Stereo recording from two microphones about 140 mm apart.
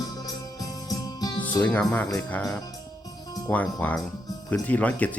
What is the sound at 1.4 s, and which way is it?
Speech, 10° left (ahead or behind).